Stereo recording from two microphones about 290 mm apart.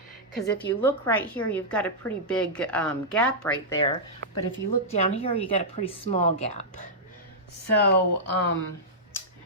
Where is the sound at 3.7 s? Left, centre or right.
Centre.